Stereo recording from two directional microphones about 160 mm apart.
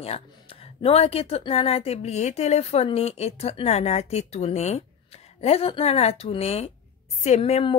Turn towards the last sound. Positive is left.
turn(degrees=40)  # may be behind; listen again after turning